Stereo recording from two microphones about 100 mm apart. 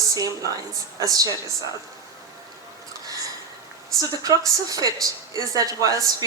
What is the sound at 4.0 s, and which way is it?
Speech, 35° right (ahead or behind).